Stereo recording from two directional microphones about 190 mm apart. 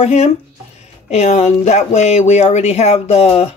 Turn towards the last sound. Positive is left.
turn(degrees=35)  # may be behind; listen again after turning